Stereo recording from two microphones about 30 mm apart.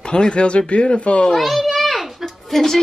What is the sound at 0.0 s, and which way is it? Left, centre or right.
Speech, left.